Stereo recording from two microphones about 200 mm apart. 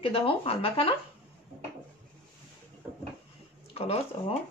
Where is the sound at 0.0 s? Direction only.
25° left (ahead or behind).